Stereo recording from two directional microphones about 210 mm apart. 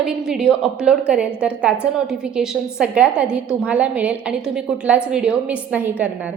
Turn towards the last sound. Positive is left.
turn(degrees=-10)  # may be behind; listen again after turning